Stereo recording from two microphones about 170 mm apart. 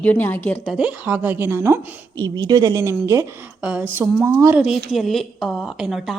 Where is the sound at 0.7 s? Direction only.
5° right (ahead or behind).